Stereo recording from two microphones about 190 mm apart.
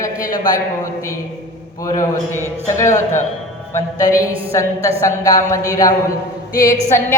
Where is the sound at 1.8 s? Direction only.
20° left (ahead or behind).